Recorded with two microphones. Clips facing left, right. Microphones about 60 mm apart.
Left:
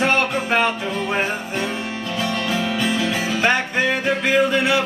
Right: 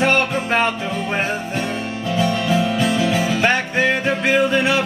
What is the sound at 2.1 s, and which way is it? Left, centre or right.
Music, centre.